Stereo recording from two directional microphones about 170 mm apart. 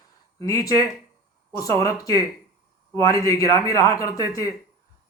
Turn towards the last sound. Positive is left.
turn(degrees=20)  # may be behind; listen again after turning